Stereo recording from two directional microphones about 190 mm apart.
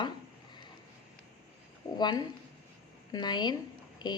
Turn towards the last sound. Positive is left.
turn(degrees=20)  # may be behind; listen again after turning